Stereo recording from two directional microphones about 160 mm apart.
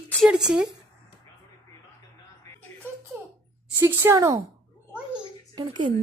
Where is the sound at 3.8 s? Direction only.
15° right (ahead or behind).